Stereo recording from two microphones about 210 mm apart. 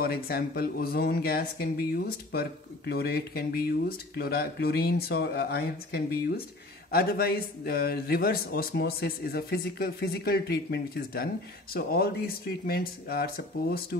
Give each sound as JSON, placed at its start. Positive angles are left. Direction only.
{"t": 0.0, "sound": "speech", "side_deg": 45}